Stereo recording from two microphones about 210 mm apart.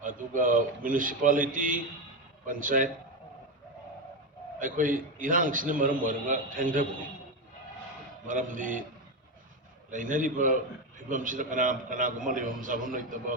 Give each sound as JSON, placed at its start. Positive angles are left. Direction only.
{"t": 0.0, "sound": "a man's voice", "side_deg": -40}
{"t": 4.6, "sound": "a man's voice", "side_deg": -40}
{"t": 8.3, "sound": "a man's voice", "side_deg": -40}
{"t": 9.9, "sound": "a man's voice", "side_deg": -40}